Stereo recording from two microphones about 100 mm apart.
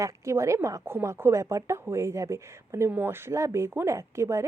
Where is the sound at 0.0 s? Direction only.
30° right (ahead or behind).